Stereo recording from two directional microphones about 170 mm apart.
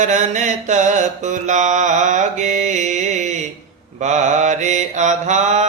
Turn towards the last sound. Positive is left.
turn(degrees=-45)  # may be behind; listen again after turning